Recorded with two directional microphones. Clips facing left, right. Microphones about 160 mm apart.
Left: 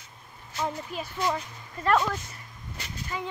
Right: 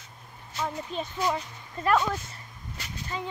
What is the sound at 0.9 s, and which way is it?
Speech, 20° right (ahead or behind).